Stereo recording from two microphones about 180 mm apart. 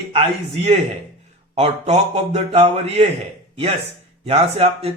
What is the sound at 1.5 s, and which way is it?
Speech, 35° right (ahead or behind).